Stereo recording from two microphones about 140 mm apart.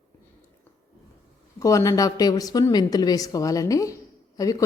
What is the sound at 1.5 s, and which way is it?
A woman's voice, 25° left (ahead or behind).